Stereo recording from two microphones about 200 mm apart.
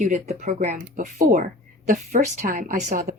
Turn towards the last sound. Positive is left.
turn(degrees=-40)  # may be behind; listen again after turning